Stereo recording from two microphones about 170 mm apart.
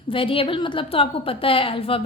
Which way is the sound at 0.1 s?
30° left (ahead or behind).